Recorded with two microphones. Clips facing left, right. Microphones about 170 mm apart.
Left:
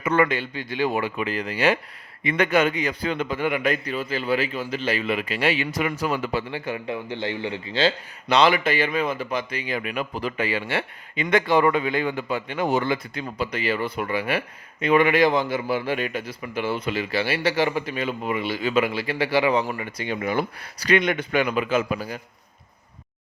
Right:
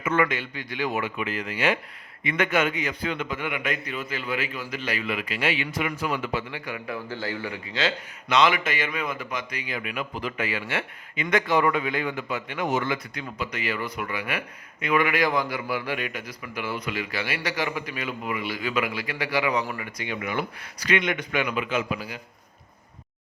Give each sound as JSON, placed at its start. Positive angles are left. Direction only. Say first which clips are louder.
{"t": 0.0, "sound": "a man's voice", "louder": "left 3 dB", "side_deg": 35}